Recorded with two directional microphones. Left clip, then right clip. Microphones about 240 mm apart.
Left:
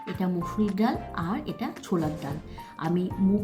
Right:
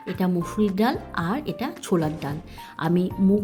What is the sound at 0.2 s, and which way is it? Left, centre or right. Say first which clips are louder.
Speech: right 5 dB; right.